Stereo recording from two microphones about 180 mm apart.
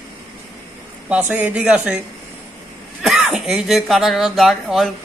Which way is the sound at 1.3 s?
10° right (ahead or behind).